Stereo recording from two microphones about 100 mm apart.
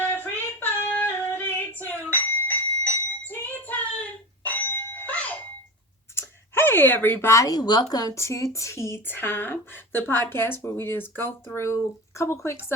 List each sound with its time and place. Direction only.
0.0 s female singing: 20° left (ahead or behind)
6.1 s a woman's voice: 25° left (ahead or behind)